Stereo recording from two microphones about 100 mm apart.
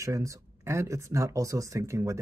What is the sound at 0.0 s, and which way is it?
Speech, 30° right (ahead or behind).